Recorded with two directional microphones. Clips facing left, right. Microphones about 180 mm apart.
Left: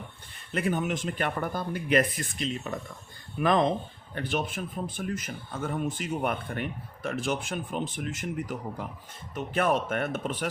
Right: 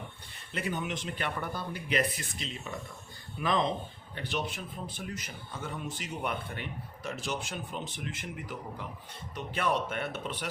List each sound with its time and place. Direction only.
0.5 s speech: 50° left (ahead or behind)